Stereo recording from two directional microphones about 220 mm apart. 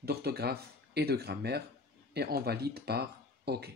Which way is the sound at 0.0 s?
45° right (ahead or behind).